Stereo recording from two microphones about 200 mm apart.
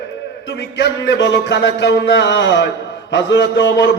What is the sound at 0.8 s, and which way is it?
A man's voice, 65° left (ahead or behind).